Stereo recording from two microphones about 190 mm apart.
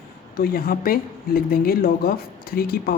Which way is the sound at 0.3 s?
55° left (ahead or behind).